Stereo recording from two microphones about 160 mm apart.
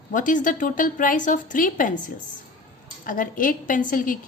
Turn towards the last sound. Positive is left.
turn(degrees=60)  # may be behind; listen again after turning